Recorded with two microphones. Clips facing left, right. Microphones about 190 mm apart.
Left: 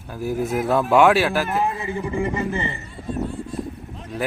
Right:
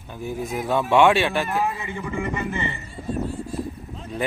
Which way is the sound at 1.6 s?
30° left (ahead or behind).